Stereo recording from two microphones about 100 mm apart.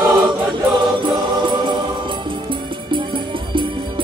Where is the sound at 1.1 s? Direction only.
50° right (ahead or behind).